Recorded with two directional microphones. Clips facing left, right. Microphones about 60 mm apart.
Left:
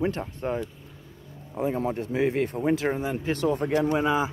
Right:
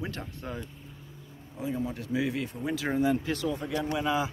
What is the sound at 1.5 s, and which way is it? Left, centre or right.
Speech, left.